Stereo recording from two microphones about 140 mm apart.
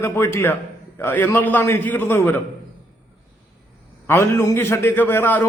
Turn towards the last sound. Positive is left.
turn(degrees=15)  # may be behind; listen again after turning